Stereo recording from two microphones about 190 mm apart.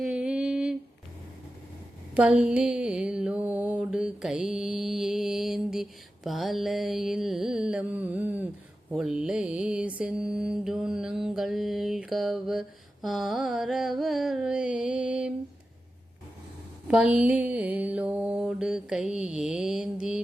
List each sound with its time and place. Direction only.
0.0 s humming: 5° right (ahead or behind)
2.1 s mantra: 5° right (ahead or behind)
16.9 s mantra: 5° right (ahead or behind)